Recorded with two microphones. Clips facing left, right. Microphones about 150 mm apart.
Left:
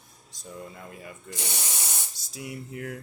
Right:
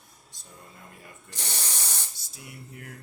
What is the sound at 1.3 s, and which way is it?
Spray, 10° left (ahead or behind).